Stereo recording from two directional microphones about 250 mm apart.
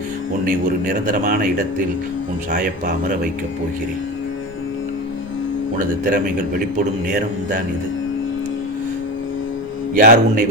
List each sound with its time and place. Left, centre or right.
0.4 s speech: right
5.8 s speech: right
9.9 s speech: right